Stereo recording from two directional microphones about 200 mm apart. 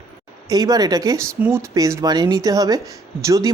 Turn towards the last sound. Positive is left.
turn(degrees=-15)  # may be behind; listen again after turning